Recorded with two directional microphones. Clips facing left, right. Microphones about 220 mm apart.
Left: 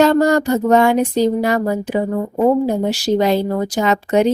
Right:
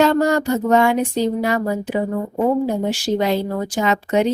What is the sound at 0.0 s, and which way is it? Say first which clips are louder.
Speech: left 3 dB; 40° left (ahead or behind).